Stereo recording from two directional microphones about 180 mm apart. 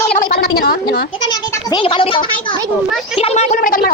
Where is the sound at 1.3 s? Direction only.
25° left (ahead or behind).